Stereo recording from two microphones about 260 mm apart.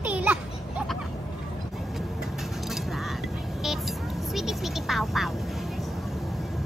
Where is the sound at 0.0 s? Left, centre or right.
Centre.